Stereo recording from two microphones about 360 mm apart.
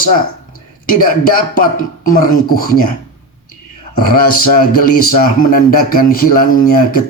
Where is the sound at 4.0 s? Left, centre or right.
Left.